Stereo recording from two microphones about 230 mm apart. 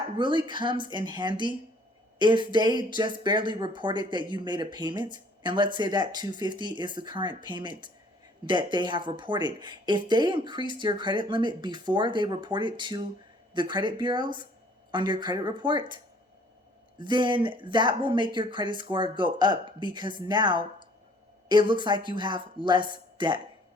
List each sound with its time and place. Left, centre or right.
0.2 s speech: centre
17.0 s speech: centre